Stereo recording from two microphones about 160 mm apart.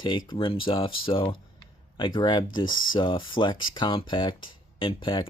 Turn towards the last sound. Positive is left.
turn(degrees=30)  # may be behind; listen again after turning